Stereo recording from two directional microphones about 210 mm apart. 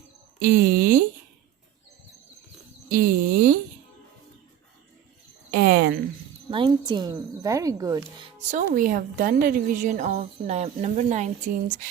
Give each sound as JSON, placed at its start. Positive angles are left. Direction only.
{"t": 0.3, "sound": "speech", "side_deg": -40}
{"t": 2.9, "sound": "speech", "side_deg": -45}
{"t": 5.5, "sound": "a sound", "side_deg": -45}
{"t": 6.5, "sound": "a woman's voice", "side_deg": -20}
{"t": 8.4, "sound": "a woman's voice", "side_deg": -35}